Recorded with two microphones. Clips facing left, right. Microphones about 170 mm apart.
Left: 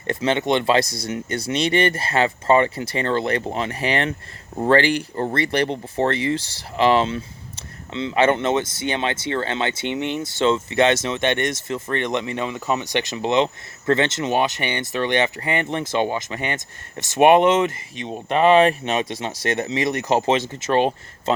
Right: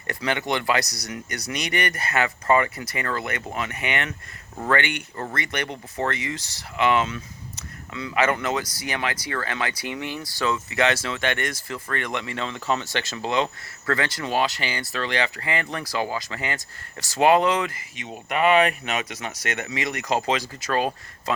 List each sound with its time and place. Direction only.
0.1 s speech: 25° left (ahead or behind)